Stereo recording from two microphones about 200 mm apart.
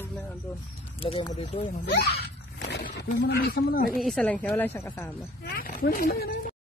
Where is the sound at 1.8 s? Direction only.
55° left (ahead or behind).